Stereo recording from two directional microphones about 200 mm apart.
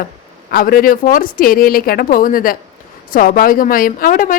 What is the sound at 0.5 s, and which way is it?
A woman's voice, 45° left (ahead or behind).